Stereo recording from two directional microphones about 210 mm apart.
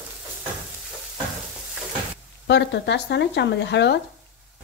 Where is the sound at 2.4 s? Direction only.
55° left (ahead or behind).